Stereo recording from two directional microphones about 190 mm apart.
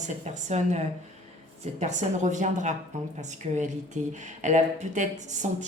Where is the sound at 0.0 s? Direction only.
40° right (ahead or behind).